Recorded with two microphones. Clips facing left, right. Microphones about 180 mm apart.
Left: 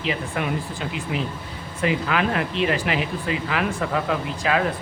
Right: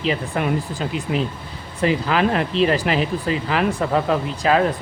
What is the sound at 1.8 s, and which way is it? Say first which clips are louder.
Speech: right 4 dB; 35° right (ahead or behind).